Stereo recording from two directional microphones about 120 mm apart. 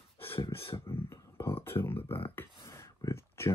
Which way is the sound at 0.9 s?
20° left (ahead or behind).